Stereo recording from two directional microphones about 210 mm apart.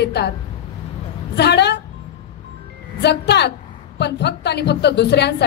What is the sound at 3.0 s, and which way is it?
A woman's voice, 55° left (ahead or behind).